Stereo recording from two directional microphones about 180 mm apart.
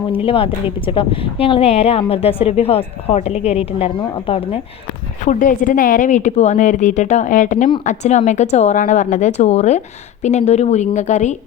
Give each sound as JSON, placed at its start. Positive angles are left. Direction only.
{"t": 0.1, "sound": "a woman's voice", "side_deg": 30}
{"t": 5.2, "sound": "a woman's voice", "side_deg": 45}